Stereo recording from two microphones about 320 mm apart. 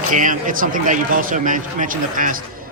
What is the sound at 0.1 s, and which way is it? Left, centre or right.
A man's voice, right.